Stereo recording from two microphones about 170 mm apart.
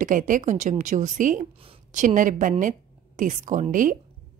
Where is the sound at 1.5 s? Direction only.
35° right (ahead or behind).